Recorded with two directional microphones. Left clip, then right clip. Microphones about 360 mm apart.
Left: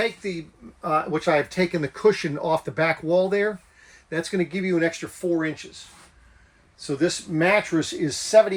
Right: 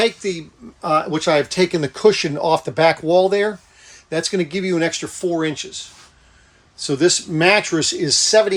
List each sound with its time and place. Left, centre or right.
0.8 s speech: centre
6.8 s speech: centre